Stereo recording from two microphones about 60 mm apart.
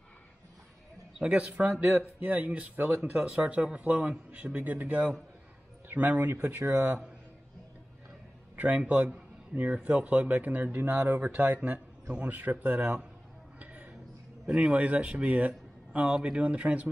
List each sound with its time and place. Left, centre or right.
1.2 s a man's voice: right
6.3 s speech: right
8.5 s speech: right
13.6 s a sound: right
14.4 s speech: centre